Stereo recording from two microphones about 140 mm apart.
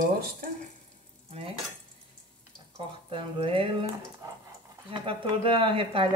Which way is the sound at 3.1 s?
40° right (ahead or behind).